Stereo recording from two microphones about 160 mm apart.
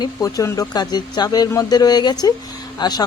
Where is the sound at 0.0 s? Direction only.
20° left (ahead or behind).